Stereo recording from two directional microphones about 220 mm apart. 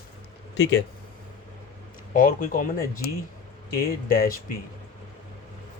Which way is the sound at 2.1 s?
40° left (ahead or behind).